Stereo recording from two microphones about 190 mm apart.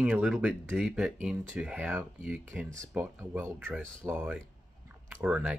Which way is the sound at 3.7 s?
5° left (ahead or behind).